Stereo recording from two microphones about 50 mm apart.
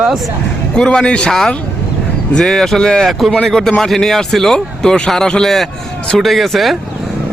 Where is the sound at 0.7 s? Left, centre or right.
Centre.